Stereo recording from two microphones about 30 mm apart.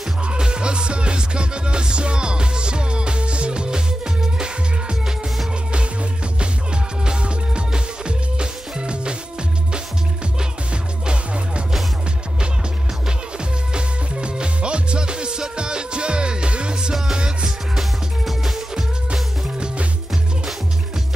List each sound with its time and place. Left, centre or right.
0.4 s music: right
7.1 s music: right
10.7 s music: right
13.7 s music: right
17.5 s music: centre